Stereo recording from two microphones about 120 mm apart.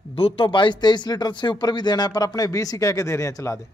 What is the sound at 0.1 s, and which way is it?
Speech, 50° left (ahead or behind).